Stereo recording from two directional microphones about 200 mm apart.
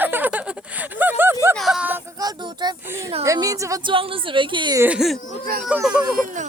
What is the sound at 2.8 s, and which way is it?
A child's voice, 10° right (ahead or behind).